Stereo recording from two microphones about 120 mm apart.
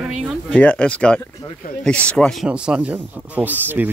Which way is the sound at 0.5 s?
10° left (ahead or behind).